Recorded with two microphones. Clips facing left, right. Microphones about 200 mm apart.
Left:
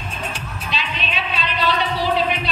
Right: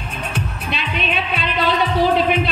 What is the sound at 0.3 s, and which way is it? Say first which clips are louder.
Music: right 4 dB; 55° right (ahead or behind).